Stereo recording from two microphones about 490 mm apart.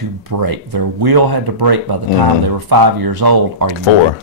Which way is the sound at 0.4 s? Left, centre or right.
Right.